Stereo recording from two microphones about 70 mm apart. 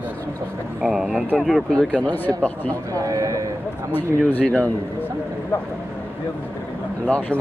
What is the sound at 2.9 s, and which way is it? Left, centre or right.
Speech, right.